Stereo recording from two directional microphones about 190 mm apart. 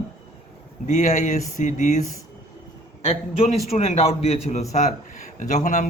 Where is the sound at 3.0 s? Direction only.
30° left (ahead or behind).